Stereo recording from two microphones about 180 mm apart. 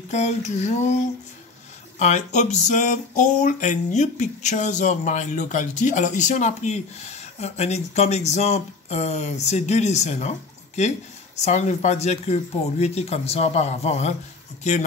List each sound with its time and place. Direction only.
0.1 s speech: 40° left (ahead or behind)
2.0 s speech: 40° left (ahead or behind)
11.4 s speech: 40° left (ahead or behind)